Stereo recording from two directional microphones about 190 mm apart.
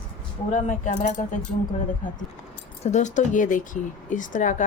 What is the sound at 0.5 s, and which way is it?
Speech, 40° left (ahead or behind).